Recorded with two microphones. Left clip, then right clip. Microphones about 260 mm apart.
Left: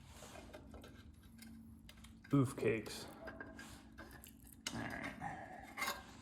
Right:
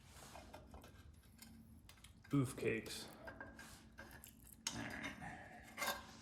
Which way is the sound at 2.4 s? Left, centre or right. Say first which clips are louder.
Left 4 dB; centre.